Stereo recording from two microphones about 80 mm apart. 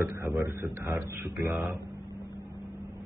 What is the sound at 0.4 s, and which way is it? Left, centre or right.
Speech, right.